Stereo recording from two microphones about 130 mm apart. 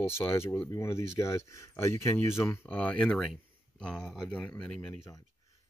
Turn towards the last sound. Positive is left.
turn(degrees=10)  # may be behind; listen again after turning